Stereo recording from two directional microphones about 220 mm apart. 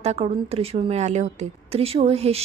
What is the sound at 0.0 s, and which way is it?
A woman's voice, 30° right (ahead or behind).